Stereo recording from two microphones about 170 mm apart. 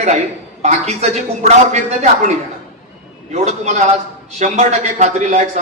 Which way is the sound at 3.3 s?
40° right (ahead or behind).